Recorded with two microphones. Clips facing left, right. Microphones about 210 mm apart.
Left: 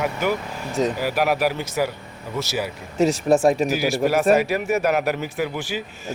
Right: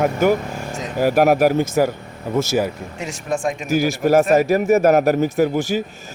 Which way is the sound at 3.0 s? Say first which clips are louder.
Left 7 dB; 35° left (ahead or behind).